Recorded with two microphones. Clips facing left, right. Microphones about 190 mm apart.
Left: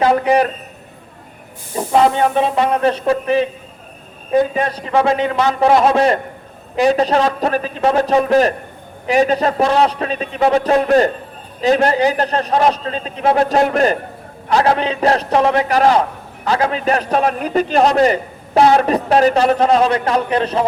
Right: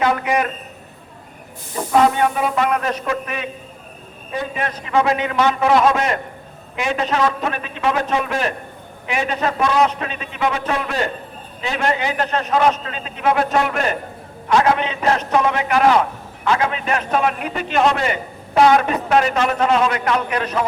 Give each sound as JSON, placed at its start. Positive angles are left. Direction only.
{"t": 0.0, "sound": "a man's voice", "side_deg": 35}
{"t": 1.7, "sound": "a man's voice", "side_deg": 30}